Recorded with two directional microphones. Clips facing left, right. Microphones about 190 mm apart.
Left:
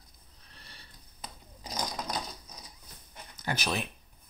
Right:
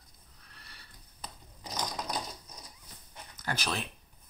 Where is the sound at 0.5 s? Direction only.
25° left (ahead or behind).